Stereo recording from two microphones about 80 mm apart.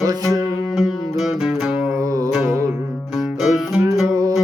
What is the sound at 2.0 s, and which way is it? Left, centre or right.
Music, right.